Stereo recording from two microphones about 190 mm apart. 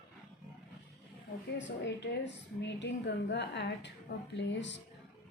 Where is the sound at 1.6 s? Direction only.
65° left (ahead or behind).